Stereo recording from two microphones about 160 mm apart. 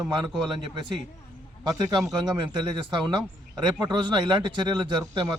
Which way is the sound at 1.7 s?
20° right (ahead or behind).